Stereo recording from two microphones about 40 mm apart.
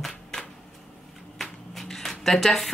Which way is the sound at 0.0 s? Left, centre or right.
Centre.